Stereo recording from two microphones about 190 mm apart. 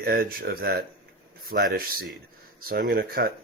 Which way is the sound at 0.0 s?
55° right (ahead or behind).